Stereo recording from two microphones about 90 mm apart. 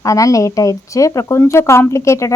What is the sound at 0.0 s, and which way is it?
Speech, 40° left (ahead or behind).